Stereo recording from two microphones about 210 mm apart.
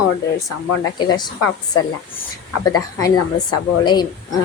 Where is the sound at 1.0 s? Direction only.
20° left (ahead or behind).